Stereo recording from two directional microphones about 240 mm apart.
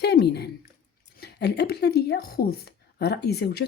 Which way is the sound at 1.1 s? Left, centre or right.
Left.